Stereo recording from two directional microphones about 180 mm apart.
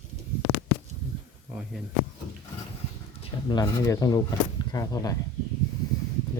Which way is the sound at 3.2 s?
25° left (ahead or behind).